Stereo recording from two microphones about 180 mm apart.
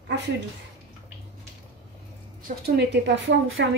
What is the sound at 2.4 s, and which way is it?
A woman's voice, 65° right (ahead or behind).